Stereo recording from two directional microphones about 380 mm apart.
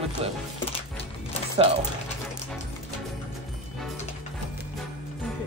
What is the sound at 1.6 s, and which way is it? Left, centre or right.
Speech, centre.